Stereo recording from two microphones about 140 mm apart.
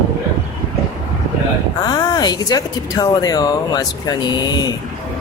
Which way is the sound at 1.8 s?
30° left (ahead or behind).